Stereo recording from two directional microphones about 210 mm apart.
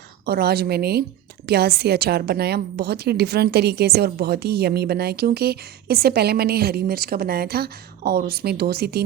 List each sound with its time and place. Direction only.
0.3 s a woman's voice: 50° right (ahead or behind)